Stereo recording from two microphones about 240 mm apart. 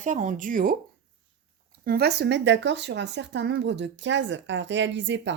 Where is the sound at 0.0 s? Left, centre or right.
Right.